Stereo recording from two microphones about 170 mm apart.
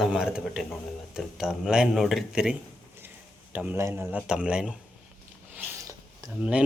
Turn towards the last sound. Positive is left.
turn(degrees=-5)  # may be behind; listen again after turning